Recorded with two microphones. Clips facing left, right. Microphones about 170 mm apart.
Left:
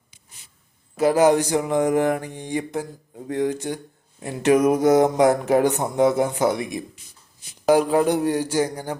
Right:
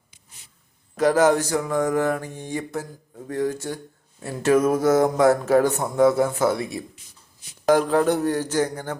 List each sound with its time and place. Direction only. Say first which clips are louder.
0.9 s speech: left 1 dB; 10° left (ahead or behind)